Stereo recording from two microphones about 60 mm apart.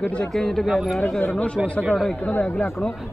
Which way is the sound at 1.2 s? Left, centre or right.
Left.